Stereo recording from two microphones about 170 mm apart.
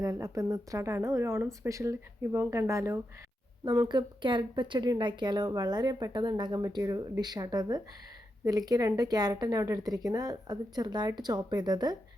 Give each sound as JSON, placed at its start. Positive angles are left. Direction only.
{"t": 0.0, "sound": "a woman's voice", "side_deg": -20}